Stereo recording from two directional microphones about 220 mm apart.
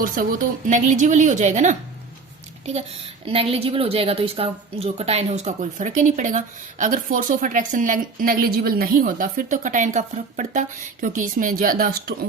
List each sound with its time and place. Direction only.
0.0 s a woman's voice: 40° right (ahead or behind)
3.2 s a woman's voice: 25° right (ahead or behind); by 12.1 s 40° right (ahead or behind)